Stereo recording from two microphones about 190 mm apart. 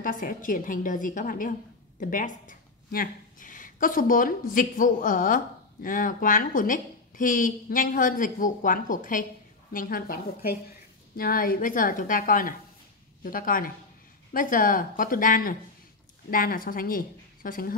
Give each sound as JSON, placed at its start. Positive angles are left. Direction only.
{"t": 0.0, "sound": "speech", "side_deg": 45}